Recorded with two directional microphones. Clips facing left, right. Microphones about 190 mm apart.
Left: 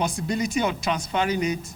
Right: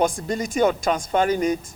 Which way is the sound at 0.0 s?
50° right (ahead or behind).